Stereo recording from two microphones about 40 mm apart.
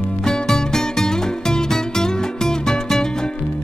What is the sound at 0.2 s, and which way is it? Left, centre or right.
Music, centre.